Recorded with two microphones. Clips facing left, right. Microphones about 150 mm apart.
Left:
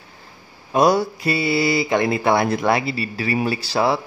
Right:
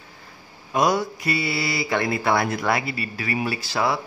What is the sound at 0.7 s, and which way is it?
Speech, 35° left (ahead or behind).